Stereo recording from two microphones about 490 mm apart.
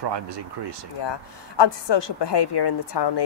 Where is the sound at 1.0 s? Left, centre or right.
Left.